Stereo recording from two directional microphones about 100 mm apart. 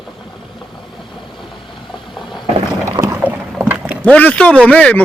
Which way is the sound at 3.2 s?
15° right (ahead or behind).